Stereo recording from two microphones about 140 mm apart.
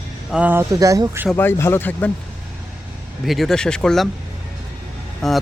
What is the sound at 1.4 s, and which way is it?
Speech, 15° left (ahead or behind).